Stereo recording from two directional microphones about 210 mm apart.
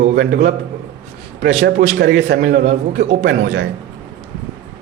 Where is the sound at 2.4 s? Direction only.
35° right (ahead or behind).